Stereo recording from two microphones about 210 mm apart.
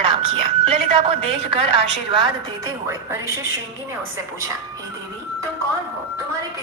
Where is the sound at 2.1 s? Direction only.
20° right (ahead or behind).